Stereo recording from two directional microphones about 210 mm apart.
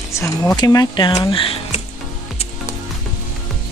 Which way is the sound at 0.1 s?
15° left (ahead or behind).